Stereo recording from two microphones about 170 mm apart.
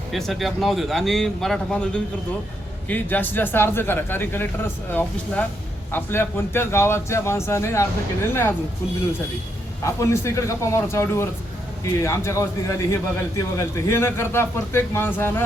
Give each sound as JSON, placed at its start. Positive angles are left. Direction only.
{"t": 0.1, "sound": "speech", "side_deg": 0}
{"t": 9.8, "sound": "speech", "side_deg": 15}